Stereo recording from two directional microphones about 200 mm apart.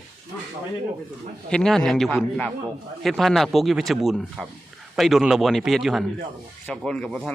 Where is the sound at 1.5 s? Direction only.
5° left (ahead or behind).